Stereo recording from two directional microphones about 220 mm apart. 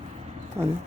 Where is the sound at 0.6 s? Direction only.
10° right (ahead or behind).